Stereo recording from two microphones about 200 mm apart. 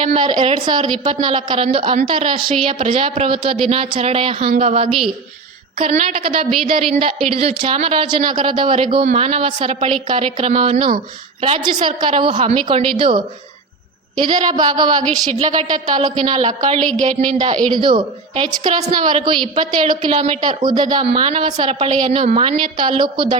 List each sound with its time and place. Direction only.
0.0 s a woman's voice: 25° right (ahead or behind)
4.9 s a woman's voice: centre (ahead or behind)
5.8 s a woman's voice: 35° right (ahead or behind)
15.0 s a woman's voice: 5° left (ahead or behind)
15.4 s speech: 40° right (ahead or behind)
16.0 s a woman's voice: 20° right (ahead or behind)
16.6 s speech: 35° right (ahead or behind)
17.7 s a woman's voice: 25° right (ahead or behind)
19.1 s a woman's voice: 25° right (ahead or behind)